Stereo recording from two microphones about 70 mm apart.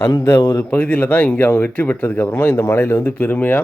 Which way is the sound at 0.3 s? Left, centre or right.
Left.